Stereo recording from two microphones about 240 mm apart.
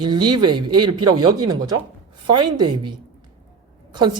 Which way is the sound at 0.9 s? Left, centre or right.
Right.